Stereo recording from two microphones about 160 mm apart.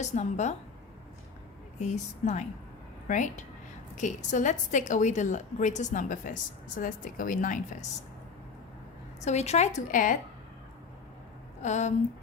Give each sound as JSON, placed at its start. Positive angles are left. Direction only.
{"t": 0.0, "sound": "a woman's voice", "side_deg": 45}
{"t": 1.8, "sound": "a woman's voice", "side_deg": 45}
{"t": 9.2, "sound": "a woman's voice", "side_deg": 45}
{"t": 11.6, "sound": "a woman's voice", "side_deg": 45}